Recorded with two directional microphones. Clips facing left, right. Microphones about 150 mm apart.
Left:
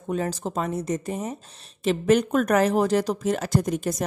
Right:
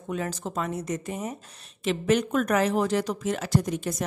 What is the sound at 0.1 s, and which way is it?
Speech, 35° left (ahead or behind).